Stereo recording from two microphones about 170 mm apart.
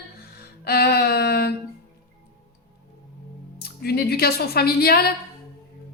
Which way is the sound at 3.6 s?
65° left (ahead or behind).